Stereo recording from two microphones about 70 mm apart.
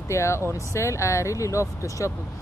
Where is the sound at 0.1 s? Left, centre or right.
Left.